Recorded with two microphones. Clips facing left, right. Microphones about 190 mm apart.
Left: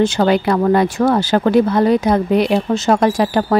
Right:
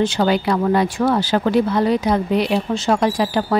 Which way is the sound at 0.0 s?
50° left (ahead or behind).